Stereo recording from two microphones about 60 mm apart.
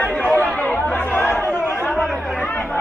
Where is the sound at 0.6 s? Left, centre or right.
Left.